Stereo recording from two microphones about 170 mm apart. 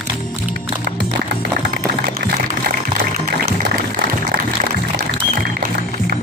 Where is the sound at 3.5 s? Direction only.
65° right (ahead or behind).